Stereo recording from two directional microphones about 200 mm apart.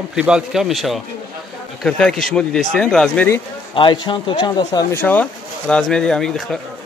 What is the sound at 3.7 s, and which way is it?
Speech, 25° left (ahead or behind).